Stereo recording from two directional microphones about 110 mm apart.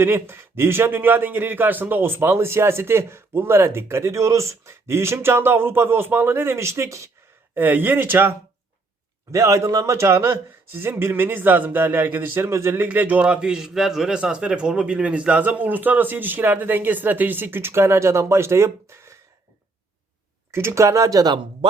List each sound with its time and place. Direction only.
0.0 s a man's voice: 20° right (ahead or behind)
20.5 s a man's voice: 25° right (ahead or behind)